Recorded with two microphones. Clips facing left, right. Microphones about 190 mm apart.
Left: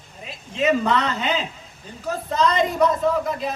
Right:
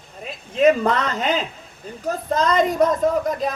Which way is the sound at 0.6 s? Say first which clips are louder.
Right 3 dB; 45° right (ahead or behind).